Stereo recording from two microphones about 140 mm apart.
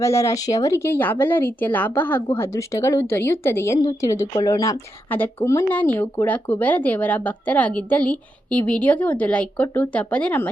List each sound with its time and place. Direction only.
0.0 s a woman's voice: 20° left (ahead or behind)
5.0 s speech: 15° left (ahead or behind)